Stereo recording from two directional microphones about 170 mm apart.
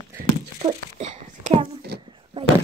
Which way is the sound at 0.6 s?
45° right (ahead or behind).